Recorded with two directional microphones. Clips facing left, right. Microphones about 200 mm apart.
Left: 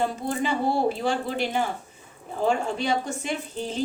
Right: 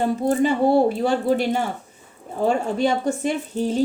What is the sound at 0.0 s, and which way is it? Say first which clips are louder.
A woman's voice: right 7 dB; 50° right (ahead or behind).